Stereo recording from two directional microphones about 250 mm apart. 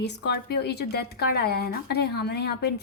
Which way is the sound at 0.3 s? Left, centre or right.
Left.